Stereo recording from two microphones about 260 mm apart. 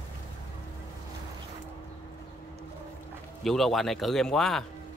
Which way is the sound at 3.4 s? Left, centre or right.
Centre.